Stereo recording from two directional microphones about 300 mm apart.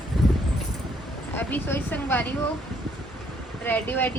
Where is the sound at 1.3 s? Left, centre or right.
Centre.